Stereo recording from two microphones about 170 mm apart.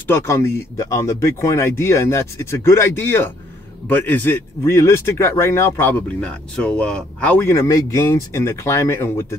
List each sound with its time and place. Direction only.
0.0 s speech: 15° left (ahead or behind)